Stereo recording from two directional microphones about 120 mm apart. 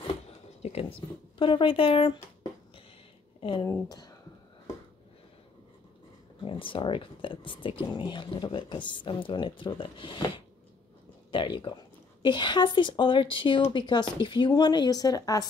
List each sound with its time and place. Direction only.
0.6 s speech: 60° left (ahead or behind)
1.4 s speech: 45° left (ahead or behind)
3.3 s speech: 45° left (ahead or behind)
6.4 s speech: 45° left (ahead or behind); by 15.4 s 30° left (ahead or behind)